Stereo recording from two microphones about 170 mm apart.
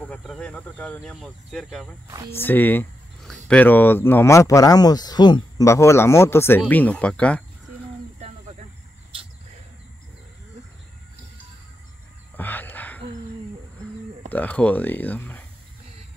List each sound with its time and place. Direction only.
0.0 s speech: 5° left (ahead or behind)
2.0 s speech: 20° right (ahead or behind)
2.3 s speech: 10° left (ahead or behind)
8.2 s cricket: 40° right (ahead or behind)
12.4 s a sound: 10° left (ahead or behind)
14.3 s speech: 10° left (ahead or behind)